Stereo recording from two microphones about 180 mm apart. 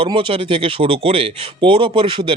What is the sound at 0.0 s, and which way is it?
Speech, 30° right (ahead or behind).